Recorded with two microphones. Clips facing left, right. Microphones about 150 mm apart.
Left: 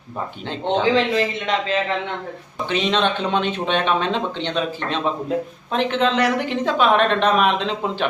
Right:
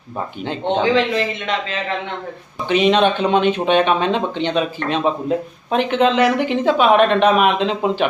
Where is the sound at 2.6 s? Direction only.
10° right (ahead or behind).